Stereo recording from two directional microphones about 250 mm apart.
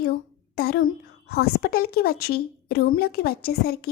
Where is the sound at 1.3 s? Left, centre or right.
Left.